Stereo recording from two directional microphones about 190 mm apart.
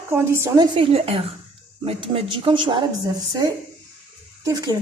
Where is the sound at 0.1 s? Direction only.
15° right (ahead or behind).